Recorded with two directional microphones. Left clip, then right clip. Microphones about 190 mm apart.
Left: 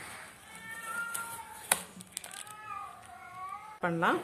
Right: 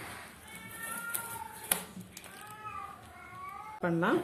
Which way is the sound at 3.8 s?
30° left (ahead or behind).